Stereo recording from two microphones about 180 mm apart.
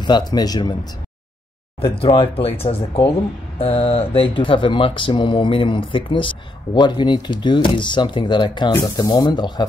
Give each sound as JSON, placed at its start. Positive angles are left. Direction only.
{"t": 0.0, "sound": "speech", "side_deg": 25}
{"t": 2.0, "sound": "speech", "side_deg": 30}